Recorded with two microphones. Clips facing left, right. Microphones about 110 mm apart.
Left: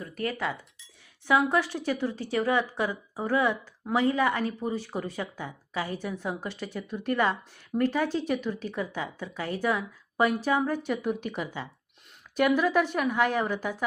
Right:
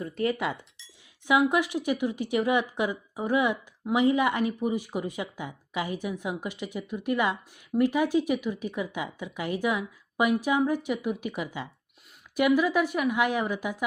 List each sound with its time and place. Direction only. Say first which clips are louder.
0.0 s speech: right 3 dB; 25° right (ahead or behind)